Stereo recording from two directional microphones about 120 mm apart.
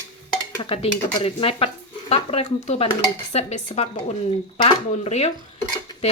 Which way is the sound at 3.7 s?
45° left (ahead or behind).